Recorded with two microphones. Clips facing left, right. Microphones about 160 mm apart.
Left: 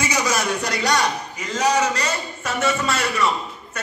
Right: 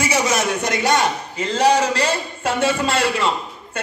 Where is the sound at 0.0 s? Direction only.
25° right (ahead or behind).